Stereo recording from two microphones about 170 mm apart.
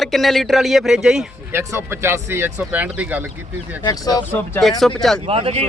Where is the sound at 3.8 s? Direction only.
20° left (ahead or behind).